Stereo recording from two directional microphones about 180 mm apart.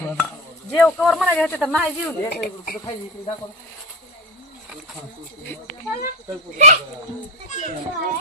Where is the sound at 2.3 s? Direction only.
60° left (ahead or behind).